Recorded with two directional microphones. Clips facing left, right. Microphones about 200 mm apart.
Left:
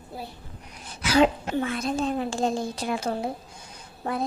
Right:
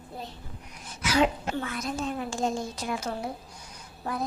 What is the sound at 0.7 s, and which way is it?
Sneeze, 30° left (ahead or behind).